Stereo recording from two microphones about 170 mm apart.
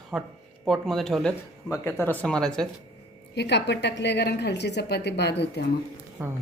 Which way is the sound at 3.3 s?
90° left.